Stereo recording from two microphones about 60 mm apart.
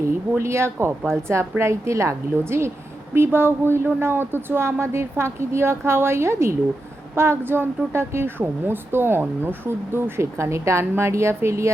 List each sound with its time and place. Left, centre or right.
0.0 s speech: right